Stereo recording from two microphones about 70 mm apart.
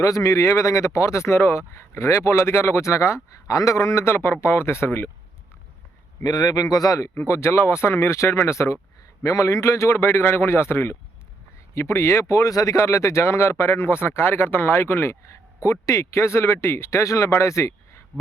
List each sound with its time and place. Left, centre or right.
0.0 s speech: left
4.0 s speech: left
6.2 s a man's voice: left
7.3 s speech: left
12.3 s speech: left